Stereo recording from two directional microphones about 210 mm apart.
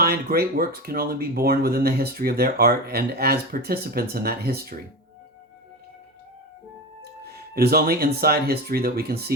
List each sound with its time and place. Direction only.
0.0 s speech: 45° right (ahead or behind)
7.0 s speech: 50° right (ahead or behind)